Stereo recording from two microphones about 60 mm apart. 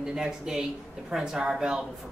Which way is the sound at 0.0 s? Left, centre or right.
Centre.